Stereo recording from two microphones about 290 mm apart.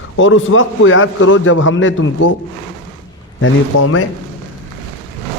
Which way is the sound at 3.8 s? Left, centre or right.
Left.